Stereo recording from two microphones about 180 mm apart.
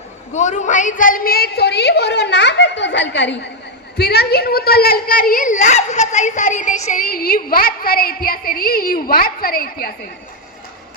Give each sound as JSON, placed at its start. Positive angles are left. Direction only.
{"t": 0.3, "sound": "a woman's voice", "side_deg": 40}
{"t": 3.9, "sound": "a child's voice", "side_deg": 65}